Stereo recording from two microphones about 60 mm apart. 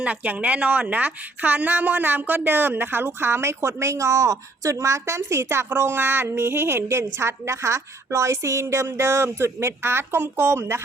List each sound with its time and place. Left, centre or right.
0.0 s a woman's voice: right